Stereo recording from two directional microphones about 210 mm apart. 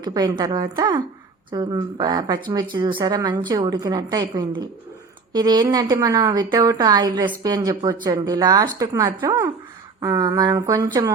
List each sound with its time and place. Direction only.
0.0 s a woman's voice: 20° right (ahead or behind)